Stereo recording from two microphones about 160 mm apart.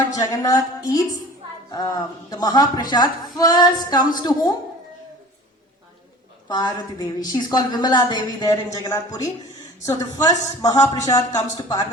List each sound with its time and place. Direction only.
0.1 s a woman's voice: 20° left (ahead or behind)
6.5 s a woman's voice: 25° left (ahead or behind)